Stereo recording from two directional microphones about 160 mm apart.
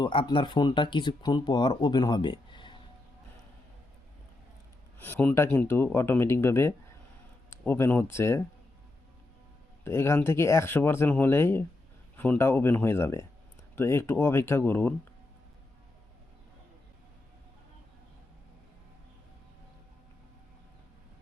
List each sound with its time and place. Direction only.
0.0 s speech: 30° left (ahead or behind)
4.9 s speech: 10° left (ahead or behind)
9.8 s speech: 15° left (ahead or behind)